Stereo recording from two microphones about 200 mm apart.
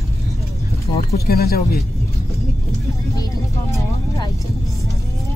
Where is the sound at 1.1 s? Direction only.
50° left (ahead or behind).